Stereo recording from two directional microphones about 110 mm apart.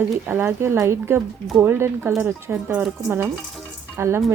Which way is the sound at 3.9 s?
25° right (ahead or behind).